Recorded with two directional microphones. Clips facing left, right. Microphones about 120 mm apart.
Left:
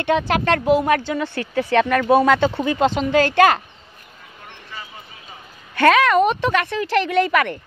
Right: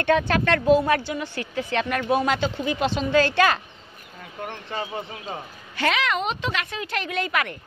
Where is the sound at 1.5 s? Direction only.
70° left (ahead or behind).